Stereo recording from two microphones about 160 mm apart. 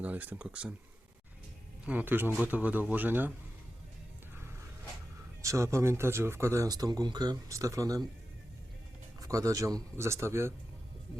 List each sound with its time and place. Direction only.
0.0 s speech: 10° right (ahead or behind)
1.8 s speech: 10° right (ahead or behind)
5.4 s speech: 20° right (ahead or behind)
9.2 s speech: 20° right (ahead or behind)